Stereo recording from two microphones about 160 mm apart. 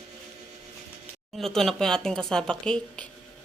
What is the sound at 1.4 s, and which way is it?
Speech, centre (ahead or behind).